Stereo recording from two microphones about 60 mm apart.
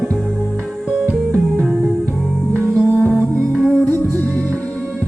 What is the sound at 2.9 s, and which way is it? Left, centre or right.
Music, right.